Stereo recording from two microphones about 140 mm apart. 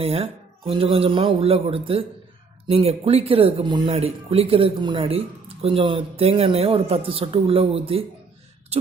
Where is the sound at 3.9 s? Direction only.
45° right (ahead or behind).